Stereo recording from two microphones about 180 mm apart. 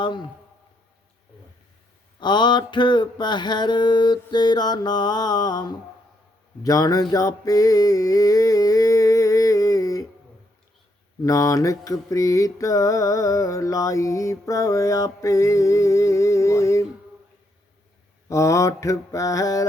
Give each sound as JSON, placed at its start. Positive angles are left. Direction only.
{"t": 0.0, "sound": "a man's voice", "side_deg": 25}
{"t": 2.2, "sound": "a sound", "side_deg": 25}
{"t": 6.6, "sound": "mantra", "side_deg": 20}
{"t": 11.2, "sound": "mantra", "side_deg": 20}
{"t": 18.3, "sound": "mantra", "side_deg": 15}